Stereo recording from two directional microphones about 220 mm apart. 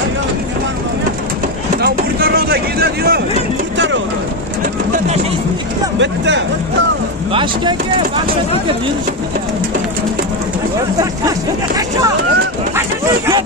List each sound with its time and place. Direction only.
1.8 s a sound: 45° right (ahead or behind)
3.7 s vehicle: 55° right (ahead or behind)
5.9 s speech: 55° right (ahead or behind)
11.0 s speech: 15° right (ahead or behind)